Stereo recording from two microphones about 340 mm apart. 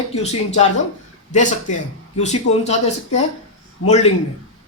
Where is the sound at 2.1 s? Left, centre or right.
Centre.